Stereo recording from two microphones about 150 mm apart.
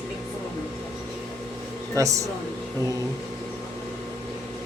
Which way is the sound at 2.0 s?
20° right (ahead or behind).